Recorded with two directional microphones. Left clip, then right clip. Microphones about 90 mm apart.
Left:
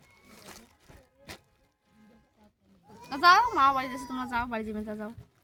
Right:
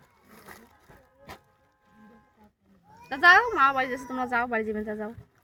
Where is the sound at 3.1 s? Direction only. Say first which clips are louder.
Right 2 dB; 65° left (ahead or behind); by 5.1 s 40° left (ahead or behind).